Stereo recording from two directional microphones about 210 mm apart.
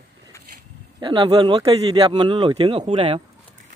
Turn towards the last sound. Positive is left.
turn(degrees=-25)  # may be behind; listen again after turning